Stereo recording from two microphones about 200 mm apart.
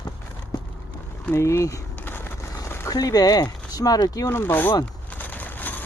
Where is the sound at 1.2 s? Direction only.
15° left (ahead or behind).